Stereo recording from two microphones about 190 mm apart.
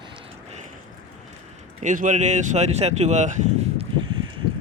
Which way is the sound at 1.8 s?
40° right (ahead or behind).